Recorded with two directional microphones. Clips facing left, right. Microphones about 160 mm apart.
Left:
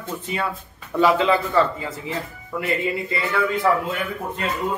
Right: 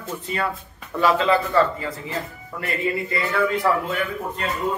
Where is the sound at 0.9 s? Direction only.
15° left (ahead or behind).